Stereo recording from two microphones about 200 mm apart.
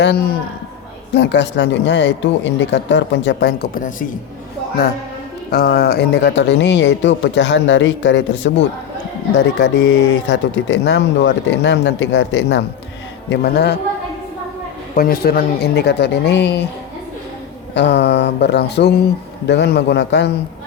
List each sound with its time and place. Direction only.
1.1 s speech: 60° left (ahead or behind); by 4.0 s 40° left (ahead or behind)
5.5 s speech: 50° left (ahead or behind); by 8.5 s 65° left (ahead or behind)
9.6 s a woman's voice: 60° left (ahead or behind)
14.9 s speech: 45° left (ahead or behind)
17.7 s speech: 55° left (ahead or behind)